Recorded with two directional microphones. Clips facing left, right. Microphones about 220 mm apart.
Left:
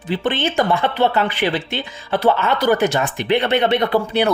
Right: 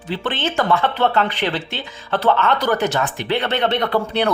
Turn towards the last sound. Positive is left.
turn(degrees=10)  # may be behind; listen again after turning